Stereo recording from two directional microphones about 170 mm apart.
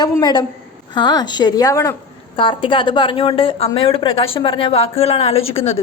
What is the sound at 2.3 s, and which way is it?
A woman's voice, 30° left (ahead or behind).